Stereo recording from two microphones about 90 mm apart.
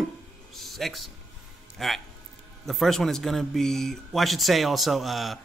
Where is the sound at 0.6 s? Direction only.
Centre (ahead or behind).